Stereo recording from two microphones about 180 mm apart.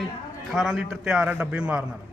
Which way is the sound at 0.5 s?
Centre (ahead or behind).